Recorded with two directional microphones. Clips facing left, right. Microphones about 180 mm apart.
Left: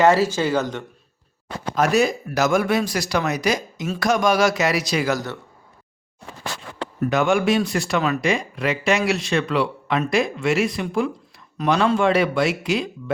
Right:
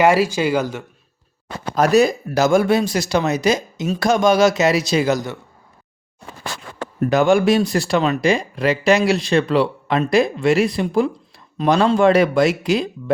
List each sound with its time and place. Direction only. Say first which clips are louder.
0.0 s speech: right 1 dB; 10° right (ahead or behind)
1.7 s speech: right 4 dB; 35° right (ahead or behind); by 5.4 s 15° right (ahead or behind)
7.0 s speech: right 4 dB; 35° right (ahead or behind)